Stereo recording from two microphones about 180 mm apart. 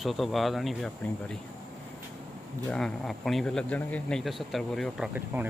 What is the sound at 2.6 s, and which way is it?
Speech, 5° left (ahead or behind).